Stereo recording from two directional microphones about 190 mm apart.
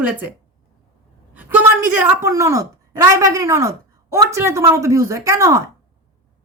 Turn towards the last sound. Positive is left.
turn(degrees=-15)  # may be behind; listen again after turning